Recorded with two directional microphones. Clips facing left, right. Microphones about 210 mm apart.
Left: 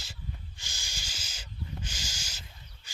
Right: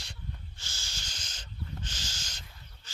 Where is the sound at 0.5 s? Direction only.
15° left (ahead or behind).